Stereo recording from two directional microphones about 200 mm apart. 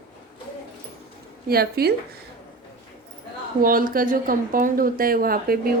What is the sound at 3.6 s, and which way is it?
Speech, 45° right (ahead or behind).